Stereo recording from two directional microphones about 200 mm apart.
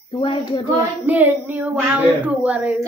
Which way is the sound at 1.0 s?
10° right (ahead or behind).